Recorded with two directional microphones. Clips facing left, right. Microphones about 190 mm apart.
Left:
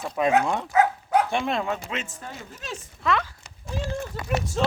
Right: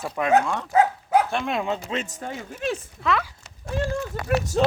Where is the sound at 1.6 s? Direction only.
20° right (ahead or behind); by 2.3 s 40° right (ahead or behind).